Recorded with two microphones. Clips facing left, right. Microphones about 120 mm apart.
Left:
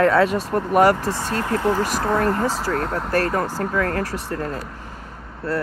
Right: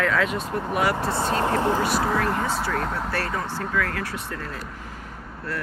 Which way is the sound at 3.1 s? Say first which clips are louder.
Left 7 dB; 45° left (ahead or behind).